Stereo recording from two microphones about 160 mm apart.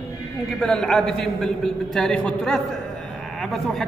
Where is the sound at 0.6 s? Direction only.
5° left (ahead or behind).